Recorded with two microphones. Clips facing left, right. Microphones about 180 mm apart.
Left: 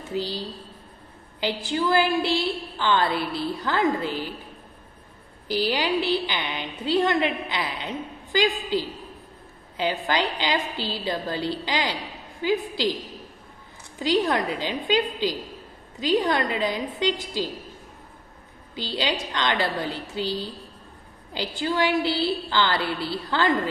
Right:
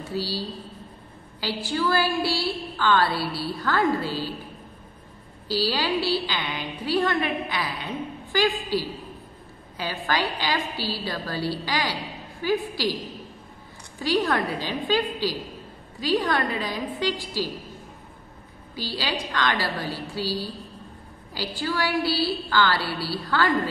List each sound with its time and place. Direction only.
0.0 s a woman's voice: 20° left (ahead or behind)
5.5 s a woman's voice: 20° left (ahead or behind)
9.8 s a woman's voice: 20° left (ahead or behind)
13.9 s a woman's voice: 20° left (ahead or behind)
18.8 s a woman's voice: 20° left (ahead or behind)